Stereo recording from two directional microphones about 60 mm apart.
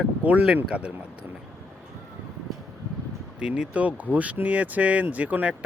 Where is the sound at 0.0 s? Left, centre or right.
Right.